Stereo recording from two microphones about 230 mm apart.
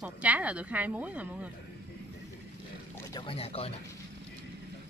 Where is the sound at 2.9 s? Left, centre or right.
Centre.